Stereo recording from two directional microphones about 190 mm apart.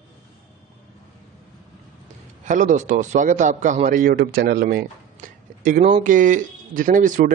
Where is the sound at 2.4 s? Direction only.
40° right (ahead or behind).